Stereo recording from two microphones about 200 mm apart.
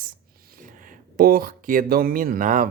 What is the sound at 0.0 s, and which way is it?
Speech, 45° right (ahead or behind).